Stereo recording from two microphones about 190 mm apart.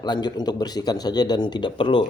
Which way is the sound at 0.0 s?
20° left (ahead or behind).